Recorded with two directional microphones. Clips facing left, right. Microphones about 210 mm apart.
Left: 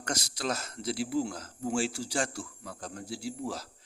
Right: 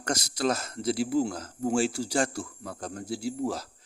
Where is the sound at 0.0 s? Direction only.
45° right (ahead or behind).